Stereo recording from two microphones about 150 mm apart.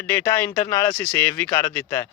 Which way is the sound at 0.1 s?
15° left (ahead or behind).